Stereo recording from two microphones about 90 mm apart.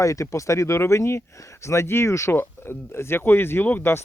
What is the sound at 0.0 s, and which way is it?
Speech, 35° left (ahead or behind).